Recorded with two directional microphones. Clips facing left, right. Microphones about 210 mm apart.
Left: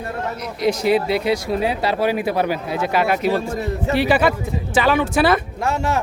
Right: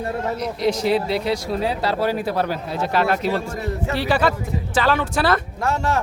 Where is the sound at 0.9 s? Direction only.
55° left (ahead or behind).